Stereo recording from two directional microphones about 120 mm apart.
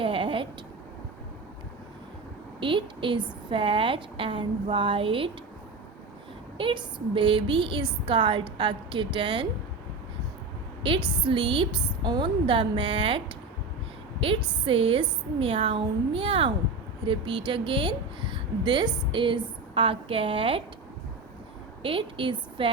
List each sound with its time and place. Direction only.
0.0 s a sound: 45° right (ahead or behind)
2.6 s a woman's voice: 45° right (ahead or behind)
6.6 s a woman's voice: 45° right (ahead or behind)
10.8 s a woman's voice: 45° right (ahead or behind)
21.8 s a woman's voice: 45° right (ahead or behind)